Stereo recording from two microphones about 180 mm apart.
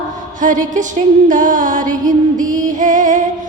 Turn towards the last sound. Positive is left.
turn(degrees=-45)  # may be behind; listen again after turning